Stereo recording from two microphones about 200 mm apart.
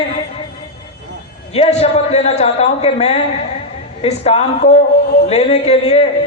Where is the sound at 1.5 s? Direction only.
30° left (ahead or behind).